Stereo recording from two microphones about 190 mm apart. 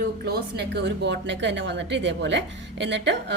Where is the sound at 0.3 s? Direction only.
60° right (ahead or behind).